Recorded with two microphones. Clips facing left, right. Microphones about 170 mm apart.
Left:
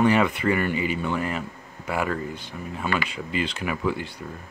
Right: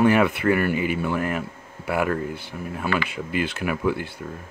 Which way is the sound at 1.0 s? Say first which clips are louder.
Right 2 dB; 5° right (ahead or behind).